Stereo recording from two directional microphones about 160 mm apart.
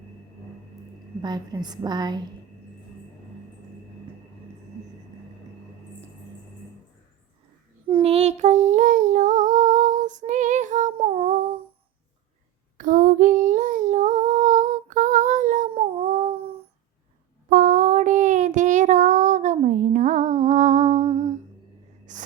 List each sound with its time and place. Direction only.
1.2 s a woman's voice: 25° right (ahead or behind)
7.9 s child singing: 35° right (ahead or behind); by 10.9 s 55° right (ahead or behind)
11.0 s humming: 35° right (ahead or behind)
12.7 s female singing: 55° right (ahead or behind)
15.7 s a sound: 35° right (ahead or behind)
17.5 s child singing: 55° right (ahead or behind)
22.1 s a sound: 50° right (ahead or behind)